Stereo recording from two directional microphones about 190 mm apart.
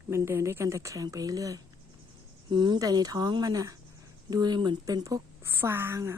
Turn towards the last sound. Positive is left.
turn(degrees=-15)  # may be behind; listen again after turning